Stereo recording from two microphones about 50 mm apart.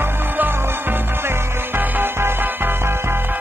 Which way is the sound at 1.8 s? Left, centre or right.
Right.